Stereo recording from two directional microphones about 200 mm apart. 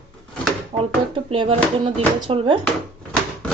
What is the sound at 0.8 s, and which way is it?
Speech, 25° right (ahead or behind).